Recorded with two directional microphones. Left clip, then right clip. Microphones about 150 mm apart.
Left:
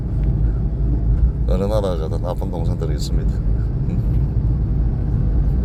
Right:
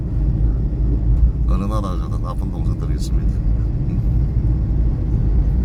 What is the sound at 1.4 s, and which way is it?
Speech, 25° left (ahead or behind).